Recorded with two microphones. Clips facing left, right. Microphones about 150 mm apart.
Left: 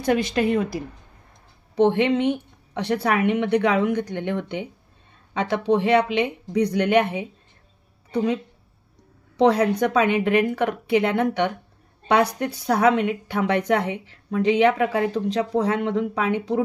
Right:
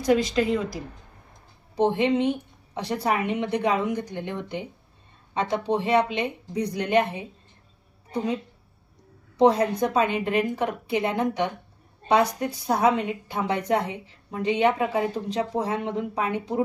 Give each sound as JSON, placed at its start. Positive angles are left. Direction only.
{"t": 0.0, "sound": "speech", "side_deg": 60}
{"t": 1.8, "sound": "a woman's voice", "side_deg": 70}
{"t": 9.4, "sound": "a woman's voice", "side_deg": 75}